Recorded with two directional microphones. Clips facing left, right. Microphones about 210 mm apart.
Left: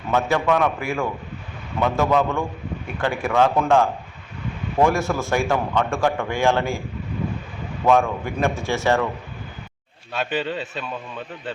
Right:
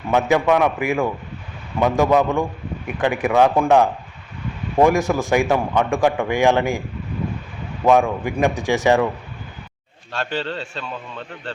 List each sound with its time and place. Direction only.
0.1 s a man's voice: 15° right (ahead or behind)
7.9 s a man's voice: 15° right (ahead or behind)
10.1 s a man's voice: 5° left (ahead or behind)